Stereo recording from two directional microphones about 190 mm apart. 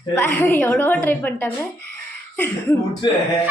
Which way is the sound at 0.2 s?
10° left (ahead or behind).